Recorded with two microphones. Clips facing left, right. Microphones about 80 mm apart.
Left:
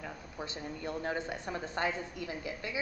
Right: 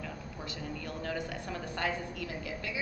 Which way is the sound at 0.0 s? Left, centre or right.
Left.